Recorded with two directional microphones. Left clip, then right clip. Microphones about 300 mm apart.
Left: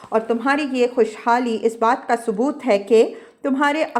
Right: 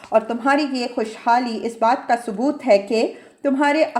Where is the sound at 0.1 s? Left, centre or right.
Centre.